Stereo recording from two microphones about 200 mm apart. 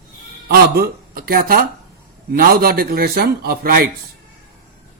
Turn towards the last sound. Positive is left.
turn(degrees=-50)  # may be behind; listen again after turning